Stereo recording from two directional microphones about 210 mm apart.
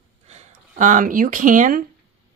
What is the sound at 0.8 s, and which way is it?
Speech, 35° right (ahead or behind).